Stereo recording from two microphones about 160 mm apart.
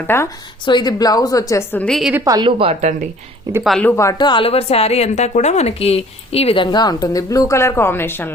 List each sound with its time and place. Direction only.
0.1 s speech: 15° left (ahead or behind)
0.6 s a woman's voice: 30° left (ahead or behind)
1.9 s a woman's voice: centre (ahead or behind)
2.1 s a woman's voice: 20° right (ahead or behind)
2.6 s speech: 35° right (ahead or behind)
3.6 s a woman's voice: centre (ahead or behind)
3.8 s a woman's voice: 20° left (ahead or behind)